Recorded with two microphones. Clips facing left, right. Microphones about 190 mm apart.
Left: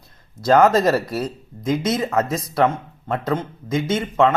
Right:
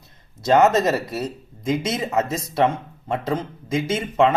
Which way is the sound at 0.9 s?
20° right (ahead or behind).